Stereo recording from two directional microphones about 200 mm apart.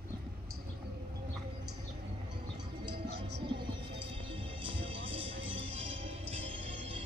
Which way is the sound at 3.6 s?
25° right (ahead or behind).